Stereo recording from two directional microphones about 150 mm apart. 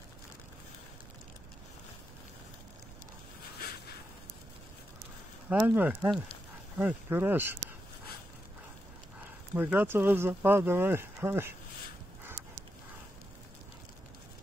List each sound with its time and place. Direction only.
5.5 s speech: 10° right (ahead or behind)
9.2 s speech: 10° right (ahead or behind)